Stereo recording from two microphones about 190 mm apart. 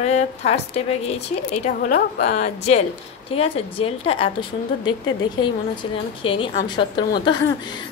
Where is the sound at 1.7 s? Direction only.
45° left (ahead or behind); by 6.5 s 30° left (ahead or behind).